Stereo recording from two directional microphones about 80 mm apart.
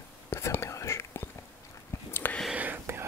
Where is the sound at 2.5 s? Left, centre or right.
Centre.